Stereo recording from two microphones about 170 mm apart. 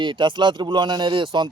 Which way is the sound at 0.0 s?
30° right (ahead or behind).